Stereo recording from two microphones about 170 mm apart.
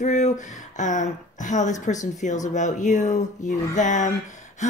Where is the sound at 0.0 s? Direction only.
45° left (ahead or behind).